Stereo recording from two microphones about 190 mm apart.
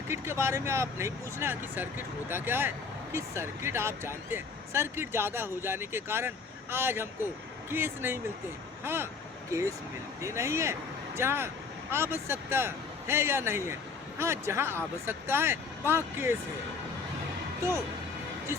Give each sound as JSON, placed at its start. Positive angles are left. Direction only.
{"t": 0.1, "sound": "speech", "side_deg": -15}